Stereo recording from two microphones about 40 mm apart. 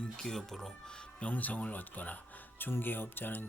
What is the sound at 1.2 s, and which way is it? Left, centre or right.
Speech, left.